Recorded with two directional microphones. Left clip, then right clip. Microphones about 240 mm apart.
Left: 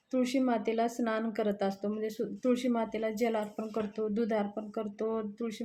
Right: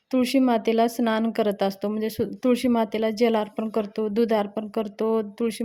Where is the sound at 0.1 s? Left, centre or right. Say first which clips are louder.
Right 8 dB; right.